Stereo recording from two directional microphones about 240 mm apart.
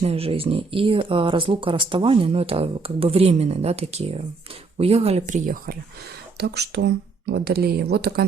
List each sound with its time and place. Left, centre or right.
0.0 s speech: right